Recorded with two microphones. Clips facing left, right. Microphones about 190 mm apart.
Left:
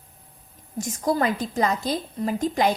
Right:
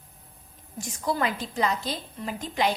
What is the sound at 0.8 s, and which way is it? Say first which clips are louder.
A woman's voice: left 5 dB; 45° left (ahead or behind).